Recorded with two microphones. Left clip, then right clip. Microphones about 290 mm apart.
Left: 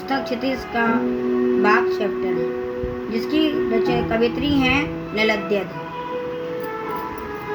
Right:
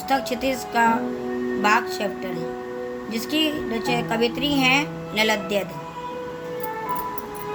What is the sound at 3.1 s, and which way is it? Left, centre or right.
Speech, right.